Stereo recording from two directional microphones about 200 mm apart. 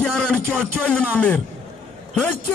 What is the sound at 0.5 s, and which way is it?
Speech, 5° left (ahead or behind).